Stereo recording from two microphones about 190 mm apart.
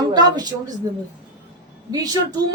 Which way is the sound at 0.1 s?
20° right (ahead or behind).